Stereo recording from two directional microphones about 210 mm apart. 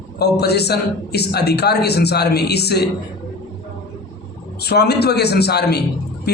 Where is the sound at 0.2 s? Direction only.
50° left (ahead or behind).